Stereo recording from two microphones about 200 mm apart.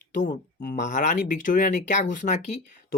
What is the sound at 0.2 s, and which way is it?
Speech, 40° left (ahead or behind).